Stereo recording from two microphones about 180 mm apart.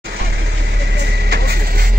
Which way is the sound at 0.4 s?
70° right (ahead or behind).